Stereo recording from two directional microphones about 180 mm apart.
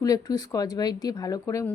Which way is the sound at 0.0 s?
20° left (ahead or behind).